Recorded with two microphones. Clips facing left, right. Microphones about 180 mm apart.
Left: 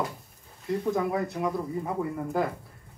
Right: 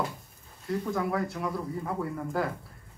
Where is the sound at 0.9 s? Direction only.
20° left (ahead or behind).